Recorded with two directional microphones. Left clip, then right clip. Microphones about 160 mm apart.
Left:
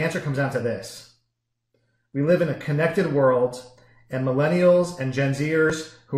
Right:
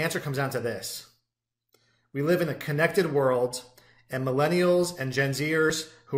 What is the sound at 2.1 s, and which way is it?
Speech, 20° right (ahead or behind).